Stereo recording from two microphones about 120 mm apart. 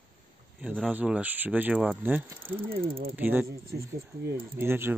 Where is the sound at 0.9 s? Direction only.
10° right (ahead or behind).